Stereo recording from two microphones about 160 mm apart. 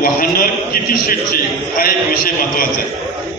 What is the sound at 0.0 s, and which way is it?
A man's voice, 65° left (ahead or behind).